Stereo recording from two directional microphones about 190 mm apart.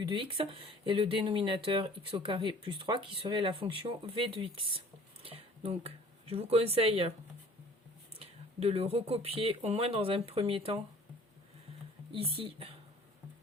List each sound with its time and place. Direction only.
0.0 s speech: 25° right (ahead or behind)
8.2 s speech: 35° right (ahead or behind)
12.1 s speech: 30° right (ahead or behind)